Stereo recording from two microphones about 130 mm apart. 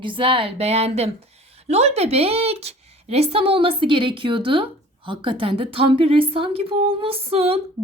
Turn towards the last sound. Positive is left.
turn(degrees=-50)  # may be behind; listen again after turning